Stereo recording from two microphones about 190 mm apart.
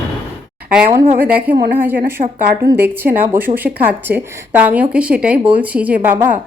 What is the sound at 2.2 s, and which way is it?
Speech, 35° right (ahead or behind).